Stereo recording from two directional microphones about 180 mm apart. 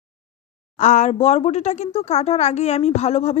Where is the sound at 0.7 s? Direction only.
45° left (ahead or behind).